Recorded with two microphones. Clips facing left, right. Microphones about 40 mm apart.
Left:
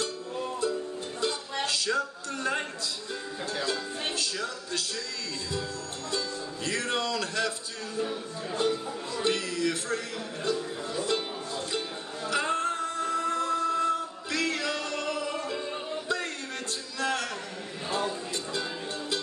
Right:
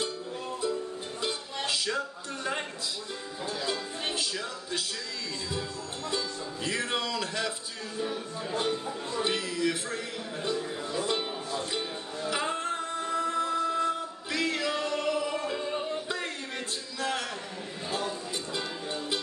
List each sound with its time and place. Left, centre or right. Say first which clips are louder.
1.2 s music: left 3 dB; centre
4.1 s speech: even; centre
6.0 s music: even; centre
8.5 s music: left 2 dB; centre
17.0 s a sound: left 2 dB; centre
18.5 s music: even; centre